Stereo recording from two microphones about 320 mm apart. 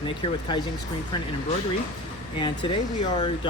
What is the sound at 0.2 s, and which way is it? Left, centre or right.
Speech, centre.